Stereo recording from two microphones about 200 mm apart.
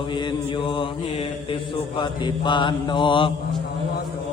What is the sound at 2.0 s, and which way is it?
Mantra, 20° left (ahead or behind).